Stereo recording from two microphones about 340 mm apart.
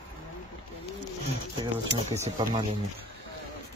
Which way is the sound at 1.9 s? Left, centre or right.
Centre.